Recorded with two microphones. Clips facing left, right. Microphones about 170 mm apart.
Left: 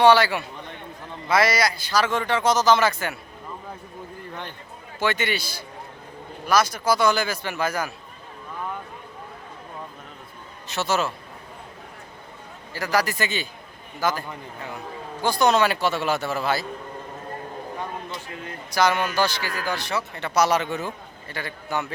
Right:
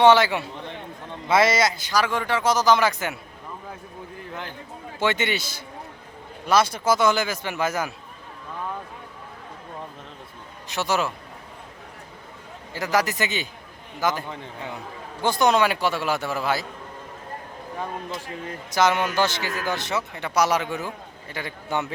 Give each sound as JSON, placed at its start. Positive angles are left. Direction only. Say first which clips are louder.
{"t": 0.0, "sound": "speech", "louder": "right 1 dB", "side_deg": -20}
{"t": 4.9, "sound": "speech", "louder": "right 1 dB", "side_deg": -25}
{"t": 10.7, "sound": "speech", "louder": "even", "side_deg": -15}
{"t": 12.7, "sound": "speech", "louder": "right 1 dB", "side_deg": -20}
{"t": 18.7, "sound": "speech", "louder": "right 1 dB", "side_deg": -20}